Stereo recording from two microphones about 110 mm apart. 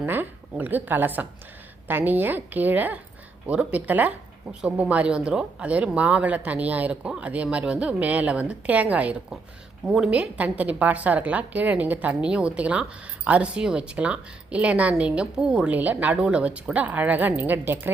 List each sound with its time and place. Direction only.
0.0 s a woman's voice: 15° right (ahead or behind)